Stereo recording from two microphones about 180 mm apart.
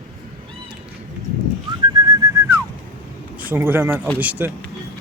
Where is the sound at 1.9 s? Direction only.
20° right (ahead or behind).